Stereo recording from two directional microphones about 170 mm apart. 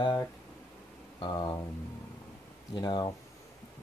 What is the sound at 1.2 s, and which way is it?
Speech, 25° left (ahead or behind).